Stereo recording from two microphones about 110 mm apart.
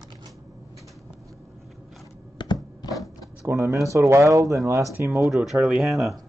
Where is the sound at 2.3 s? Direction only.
40° left (ahead or behind).